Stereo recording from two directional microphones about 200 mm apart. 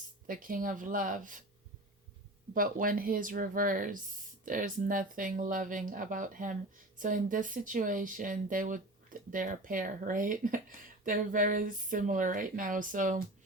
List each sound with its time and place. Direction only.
0.3 s speech: 45° right (ahead or behind)
2.6 s speech: 45° right (ahead or behind)